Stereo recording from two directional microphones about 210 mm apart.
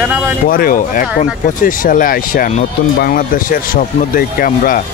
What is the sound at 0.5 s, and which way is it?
Speech, 45° left (ahead or behind).